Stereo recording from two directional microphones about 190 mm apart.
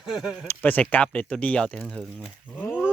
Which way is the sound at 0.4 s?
10° left (ahead or behind).